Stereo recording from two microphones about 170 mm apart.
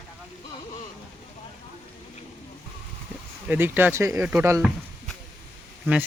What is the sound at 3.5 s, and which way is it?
Speech, 10° right (ahead or behind).